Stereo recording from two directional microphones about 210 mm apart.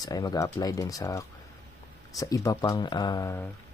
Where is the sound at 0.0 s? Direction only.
20° left (ahead or behind).